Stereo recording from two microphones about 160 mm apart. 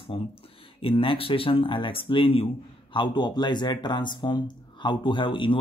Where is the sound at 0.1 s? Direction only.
35° left (ahead or behind).